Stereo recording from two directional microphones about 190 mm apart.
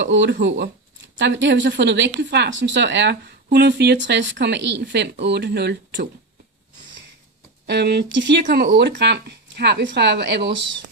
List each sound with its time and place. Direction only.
0.0 s speech: 70° right (ahead or behind)
7.6 s speech: 60° right (ahead or behind)
8.5 s speech: 50° right (ahead or behind); by 10.7 s 70° right (ahead or behind)